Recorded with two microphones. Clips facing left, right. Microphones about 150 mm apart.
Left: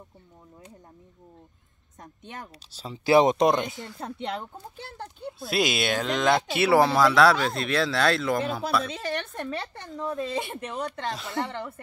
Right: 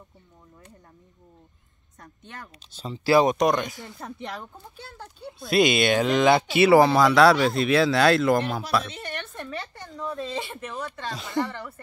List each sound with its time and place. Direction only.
2.0 s speech: 20° left (ahead or behind)
2.7 s speech: 5° left (ahead or behind)
3.0 s speech: 20° left (ahead or behind)
5.4 s speech: centre (ahead or behind)
10.0 s speech: 10° left (ahead or behind)
10.5 s speech: 25° left (ahead or behind)